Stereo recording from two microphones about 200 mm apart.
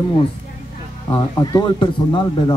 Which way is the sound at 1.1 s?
20° left (ahead or behind).